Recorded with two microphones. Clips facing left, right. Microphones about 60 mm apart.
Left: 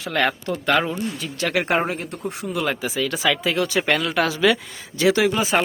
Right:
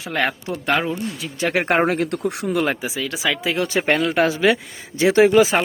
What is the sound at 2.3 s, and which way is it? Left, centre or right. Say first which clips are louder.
Speech: even; right.